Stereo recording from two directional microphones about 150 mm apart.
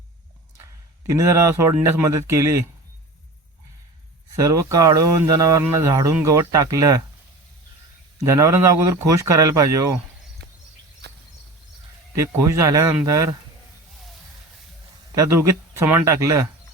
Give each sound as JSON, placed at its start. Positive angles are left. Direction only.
{"t": 1.0, "sound": "speech", "side_deg": -20}
{"t": 4.4, "sound": "speech", "side_deg": -20}
{"t": 8.2, "sound": "speech", "side_deg": -20}
{"t": 11.0, "sound": "a sound", "side_deg": -90}
{"t": 12.2, "sound": "speech", "side_deg": -20}
{"t": 15.1, "sound": "speech", "side_deg": -20}